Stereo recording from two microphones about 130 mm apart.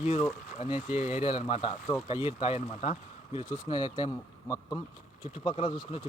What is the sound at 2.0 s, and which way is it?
Speech, 40° left (ahead or behind).